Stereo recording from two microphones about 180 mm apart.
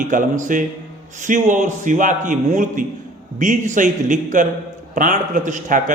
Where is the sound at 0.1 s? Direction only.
45° right (ahead or behind).